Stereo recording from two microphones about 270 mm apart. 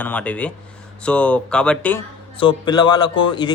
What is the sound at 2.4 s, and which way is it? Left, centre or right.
Speech, centre.